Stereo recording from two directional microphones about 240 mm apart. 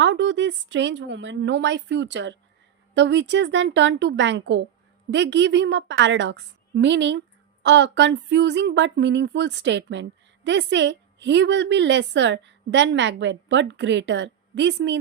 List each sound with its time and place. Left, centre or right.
0.0 s a woman's voice: right